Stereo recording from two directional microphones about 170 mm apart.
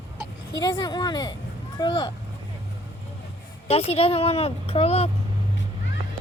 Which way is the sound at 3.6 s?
35° left (ahead or behind).